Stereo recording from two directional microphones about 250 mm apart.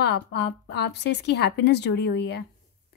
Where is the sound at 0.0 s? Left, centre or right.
Left.